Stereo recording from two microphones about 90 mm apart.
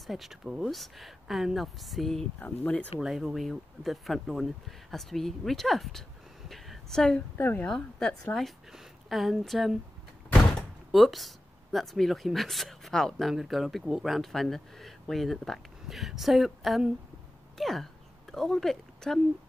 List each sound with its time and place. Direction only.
0.0 s speech: centre (ahead or behind)
2.4 s speech: 15° left (ahead or behind)
3.0 s speech: 5° right (ahead or behind)
6.5 s a sound: 5° left (ahead or behind)
7.3 s speech: 25° left (ahead or behind)
7.6 s a woman's voice: 10° left (ahead or behind)
10.9 s speech: centre (ahead or behind)